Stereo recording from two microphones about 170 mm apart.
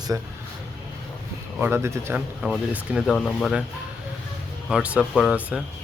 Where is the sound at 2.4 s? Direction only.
5° left (ahead or behind).